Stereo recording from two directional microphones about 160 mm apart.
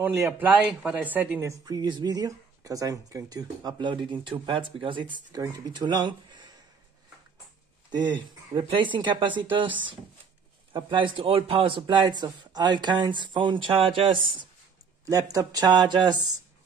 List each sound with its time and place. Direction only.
0.2 s speech: 10° right (ahead or behind)
1.7 s speech: 25° right (ahead or behind)
7.9 s speech: 30° right (ahead or behind)
10.7 s speech: 30° right (ahead or behind)
15.0 s speech: 20° right (ahead or behind)